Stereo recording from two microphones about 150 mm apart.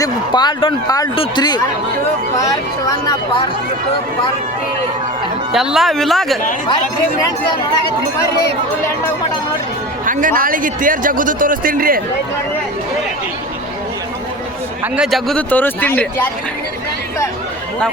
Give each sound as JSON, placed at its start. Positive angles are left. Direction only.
{"t": 0.0, "sound": "speech", "side_deg": 30}
{"t": 5.5, "sound": "speech", "side_deg": 0}
{"t": 10.1, "sound": "a man's voice", "side_deg": -65}
{"t": 14.9, "sound": "speech", "side_deg": 0}